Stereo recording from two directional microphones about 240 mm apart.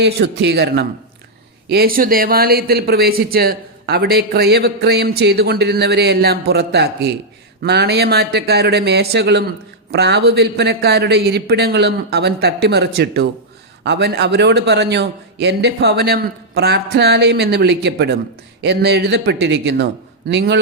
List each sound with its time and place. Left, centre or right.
0.0 s a man's voice: right